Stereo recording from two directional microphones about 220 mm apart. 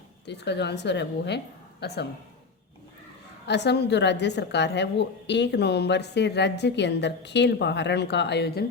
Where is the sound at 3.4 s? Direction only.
50° left (ahead or behind).